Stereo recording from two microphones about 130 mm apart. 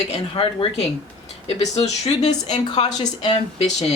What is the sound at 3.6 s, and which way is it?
Speech, 55° left (ahead or behind).